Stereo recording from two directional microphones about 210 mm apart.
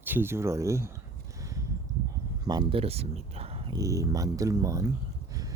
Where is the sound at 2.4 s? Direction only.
20° right (ahead or behind).